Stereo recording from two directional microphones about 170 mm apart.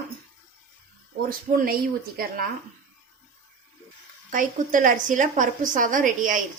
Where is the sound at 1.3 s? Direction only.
55° right (ahead or behind).